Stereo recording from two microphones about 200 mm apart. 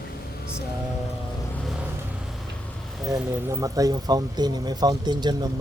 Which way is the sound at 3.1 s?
15° right (ahead or behind).